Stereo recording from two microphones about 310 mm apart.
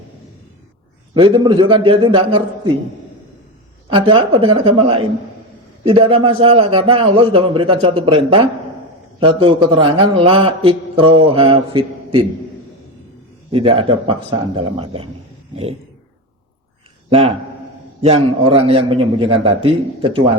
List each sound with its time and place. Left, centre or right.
1.1 s a man's voice: centre
3.8 s a man's voice: centre
13.5 s a man's voice: centre
17.1 s a man's voice: centre